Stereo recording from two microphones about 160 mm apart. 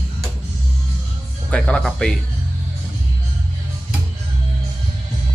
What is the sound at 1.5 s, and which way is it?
Speech, 5° left (ahead or behind).